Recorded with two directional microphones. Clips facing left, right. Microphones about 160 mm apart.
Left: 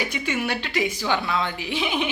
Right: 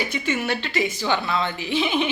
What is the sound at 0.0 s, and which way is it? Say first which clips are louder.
A woman's voice: right 1 dB; 10° left (ahead or behind).